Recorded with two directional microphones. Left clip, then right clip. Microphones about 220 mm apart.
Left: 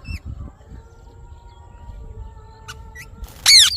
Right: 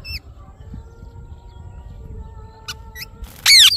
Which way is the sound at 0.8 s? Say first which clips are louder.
Right 2 dB; 50° left (ahead or behind).